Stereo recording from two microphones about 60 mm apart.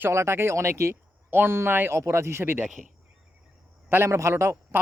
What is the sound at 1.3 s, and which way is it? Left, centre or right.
Speech, right.